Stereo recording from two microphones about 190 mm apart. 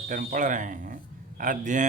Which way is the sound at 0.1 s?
45° right (ahead or behind).